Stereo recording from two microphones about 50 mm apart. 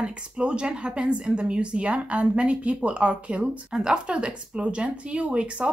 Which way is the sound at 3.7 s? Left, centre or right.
Centre.